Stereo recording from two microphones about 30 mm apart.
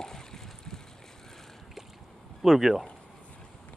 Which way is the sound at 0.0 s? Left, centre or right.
Centre.